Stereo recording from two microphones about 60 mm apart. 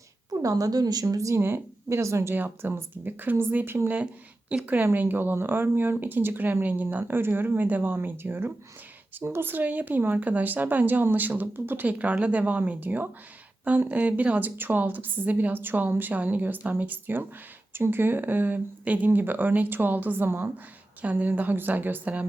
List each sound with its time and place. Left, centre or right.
0.3 s a woman's voice: right
1.4 s a woman's voice: right
1.9 s speech: right
2.3 s a woman's voice: right
3.8 s a woman's voice: right
7.0 s a woman's voice: right